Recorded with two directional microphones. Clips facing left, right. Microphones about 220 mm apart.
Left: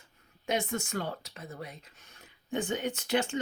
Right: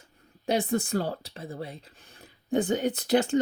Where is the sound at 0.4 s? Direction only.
35° right (ahead or behind).